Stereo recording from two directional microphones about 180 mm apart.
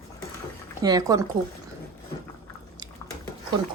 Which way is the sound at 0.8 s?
20° right (ahead or behind).